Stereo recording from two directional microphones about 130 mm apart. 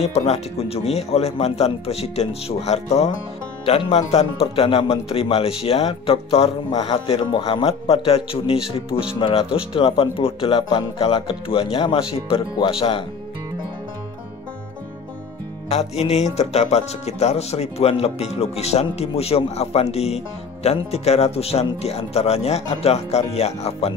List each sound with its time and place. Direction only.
0.0 s speech: 55° left (ahead or behind)
15.7 s music: 55° left (ahead or behind)
16.3 s speech: 55° left (ahead or behind)